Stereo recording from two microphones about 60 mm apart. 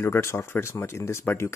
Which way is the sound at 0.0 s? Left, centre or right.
Left.